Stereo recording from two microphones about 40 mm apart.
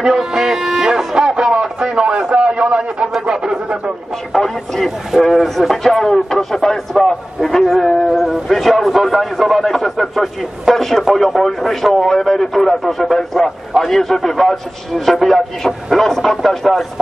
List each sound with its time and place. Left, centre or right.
0.0 s music: centre
1.5 s radio: right
2.0 s a sound: right
4.4 s speech: centre
7.8 s music: centre
8.5 s a man's voice: centre